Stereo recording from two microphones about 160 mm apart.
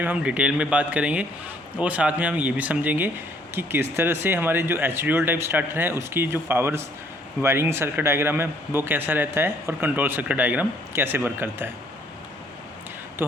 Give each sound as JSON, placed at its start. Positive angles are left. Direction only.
{"t": 0.0, "sound": "speech", "side_deg": -10}